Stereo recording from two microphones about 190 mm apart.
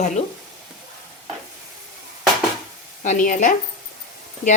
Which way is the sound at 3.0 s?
40° left (ahead or behind).